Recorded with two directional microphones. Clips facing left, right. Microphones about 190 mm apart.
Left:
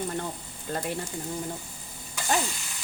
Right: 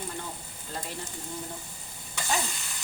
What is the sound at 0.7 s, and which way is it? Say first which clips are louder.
Speech: left 7 dB; 55° left (ahead or behind).